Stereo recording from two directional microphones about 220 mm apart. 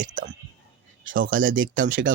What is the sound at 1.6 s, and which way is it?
Speech, 60° right (ahead or behind).